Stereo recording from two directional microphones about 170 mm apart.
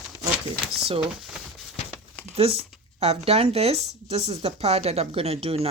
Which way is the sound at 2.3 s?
35° right (ahead or behind).